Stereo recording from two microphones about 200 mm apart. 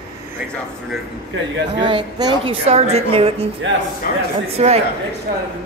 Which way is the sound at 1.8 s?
20° right (ahead or behind).